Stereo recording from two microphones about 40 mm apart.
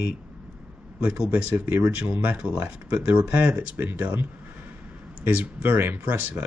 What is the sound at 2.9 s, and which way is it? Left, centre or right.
Speech, right.